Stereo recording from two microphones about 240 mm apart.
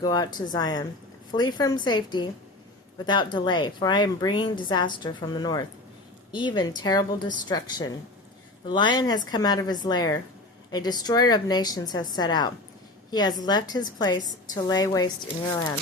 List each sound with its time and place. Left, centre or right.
0.0 s a woman's voice: centre